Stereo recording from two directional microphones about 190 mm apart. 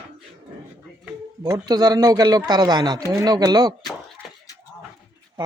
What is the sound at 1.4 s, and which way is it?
A man's voice, 20° right (ahead or behind).